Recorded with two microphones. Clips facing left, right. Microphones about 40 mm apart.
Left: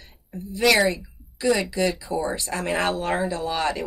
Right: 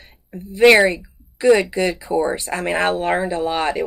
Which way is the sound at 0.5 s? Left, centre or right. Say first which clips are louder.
Right 7 dB; right.